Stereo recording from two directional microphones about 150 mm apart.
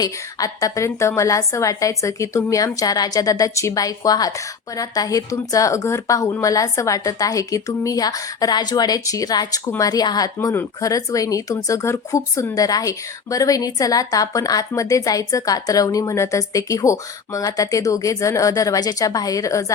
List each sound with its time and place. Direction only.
0.0 s a woman's voice: 25° left (ahead or behind)